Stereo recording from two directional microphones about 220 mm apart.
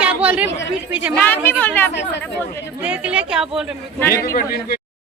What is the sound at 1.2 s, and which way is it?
Speech, 10° left (ahead or behind).